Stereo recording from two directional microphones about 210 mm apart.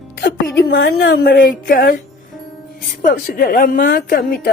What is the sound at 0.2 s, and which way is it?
A woman's voice, 45° left (ahead or behind).